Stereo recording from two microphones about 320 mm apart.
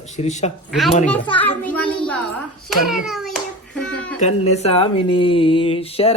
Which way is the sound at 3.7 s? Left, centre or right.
Centre.